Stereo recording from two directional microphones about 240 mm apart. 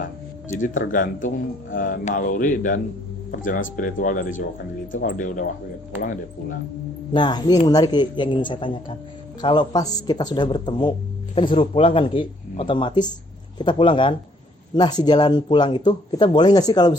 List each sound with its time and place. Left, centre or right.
0.9 s a man's voice: left
7.1 s speech: centre